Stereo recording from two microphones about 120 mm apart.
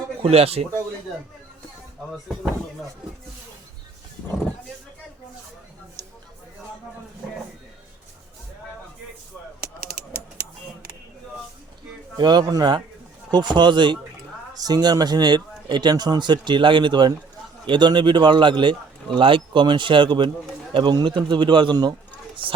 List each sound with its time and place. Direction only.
0.2 s speech: 55° right (ahead or behind)
7.2 s a sound: 5° right (ahead or behind)
12.1 s speech: 35° right (ahead or behind)